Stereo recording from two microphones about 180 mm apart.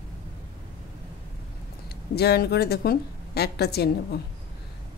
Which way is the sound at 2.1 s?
60° left (ahead or behind).